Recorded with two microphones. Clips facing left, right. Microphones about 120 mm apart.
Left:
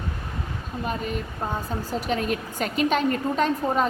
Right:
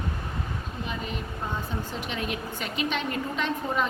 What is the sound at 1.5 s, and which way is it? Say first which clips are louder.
A woman's voice: left 4 dB; 40° left (ahead or behind).